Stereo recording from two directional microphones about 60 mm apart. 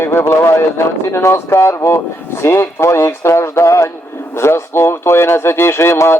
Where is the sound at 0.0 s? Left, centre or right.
Left.